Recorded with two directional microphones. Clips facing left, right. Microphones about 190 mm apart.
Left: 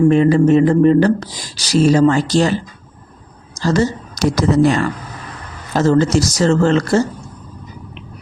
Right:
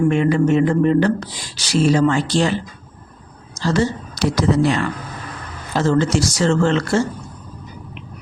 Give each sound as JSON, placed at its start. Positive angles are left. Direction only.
{"t": 0.1, "sound": "speech", "side_deg": 35}
{"t": 3.6, "sound": "speech", "side_deg": 40}